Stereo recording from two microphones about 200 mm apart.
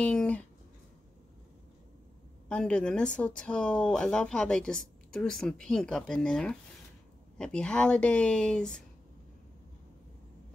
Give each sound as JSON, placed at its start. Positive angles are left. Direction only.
{"t": 0.0, "sound": "speech", "side_deg": 5}
{"t": 2.4, "sound": "speech", "side_deg": 5}